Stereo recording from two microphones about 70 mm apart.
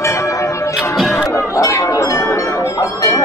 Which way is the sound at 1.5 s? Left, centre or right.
Left.